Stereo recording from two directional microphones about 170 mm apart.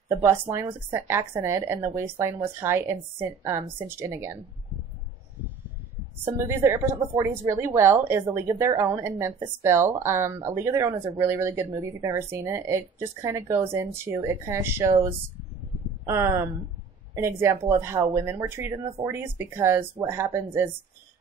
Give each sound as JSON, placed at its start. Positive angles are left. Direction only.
{"t": 0.2, "sound": "a woman's voice", "side_deg": -15}
{"t": 6.2, "sound": "a woman's voice", "side_deg": -15}